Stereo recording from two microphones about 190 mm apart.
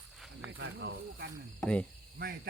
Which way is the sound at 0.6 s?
60° right (ahead or behind).